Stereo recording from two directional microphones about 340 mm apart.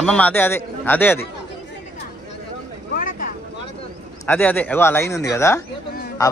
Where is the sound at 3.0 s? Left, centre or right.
Left.